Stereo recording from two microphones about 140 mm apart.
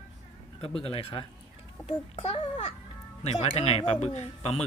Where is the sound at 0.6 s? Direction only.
45° left (ahead or behind).